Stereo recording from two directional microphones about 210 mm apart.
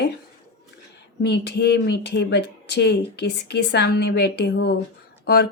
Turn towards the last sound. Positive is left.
turn(degrees=55)  # may be behind; listen again after turning